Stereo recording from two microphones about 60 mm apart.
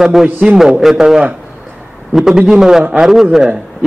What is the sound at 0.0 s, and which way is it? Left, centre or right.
A man's voice, centre.